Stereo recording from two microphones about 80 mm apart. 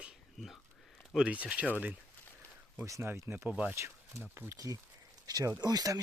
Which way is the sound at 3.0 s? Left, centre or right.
Right.